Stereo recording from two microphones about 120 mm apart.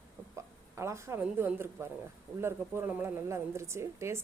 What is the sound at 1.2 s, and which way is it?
Speech, 15° right (ahead or behind).